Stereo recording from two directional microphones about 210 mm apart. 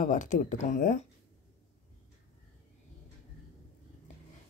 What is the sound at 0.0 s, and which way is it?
A woman's voice, 40° left (ahead or behind).